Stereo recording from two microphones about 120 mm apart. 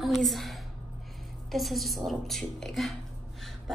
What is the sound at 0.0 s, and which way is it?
A woman's voice, centre (ahead or behind).